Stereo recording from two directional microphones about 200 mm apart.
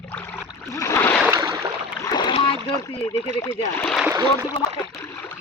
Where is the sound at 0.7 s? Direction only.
15° left (ahead or behind).